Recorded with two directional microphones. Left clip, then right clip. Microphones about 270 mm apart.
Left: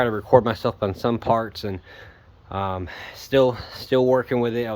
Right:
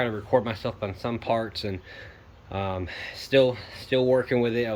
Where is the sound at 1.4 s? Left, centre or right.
Centre.